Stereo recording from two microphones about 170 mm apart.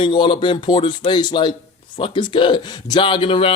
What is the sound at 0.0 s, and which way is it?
A man's voice, 30° left (ahead or behind).